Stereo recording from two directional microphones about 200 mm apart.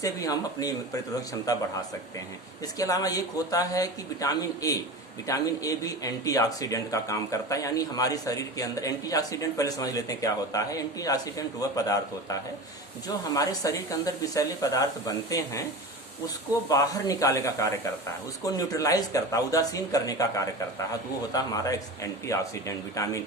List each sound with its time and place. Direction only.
0.0 s speech: 15° left (ahead or behind)
16.6 s speech: 15° left (ahead or behind)